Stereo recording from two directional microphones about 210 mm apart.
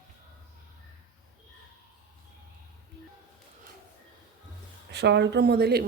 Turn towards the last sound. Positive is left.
turn(degrees=-50)  # may be behind; listen again after turning